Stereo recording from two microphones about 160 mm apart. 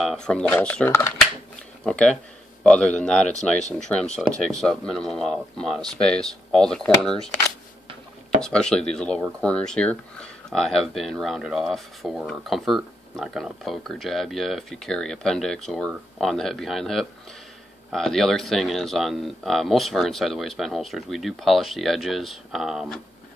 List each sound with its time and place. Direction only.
0.0 s speech: centre (ahead or behind)
3.3 s speech: 45° left (ahead or behind)
3.9 s speech: 5° left (ahead or behind)
8.4 s speech: 5° left (ahead or behind)